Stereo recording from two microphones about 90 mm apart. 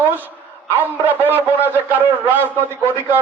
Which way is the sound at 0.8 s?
20° right (ahead or behind).